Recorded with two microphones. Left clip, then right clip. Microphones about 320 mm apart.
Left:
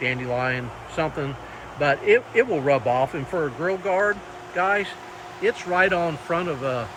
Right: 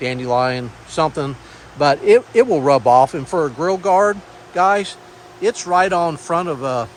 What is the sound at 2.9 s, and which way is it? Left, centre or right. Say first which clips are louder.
Speech: right 10 dB; centre.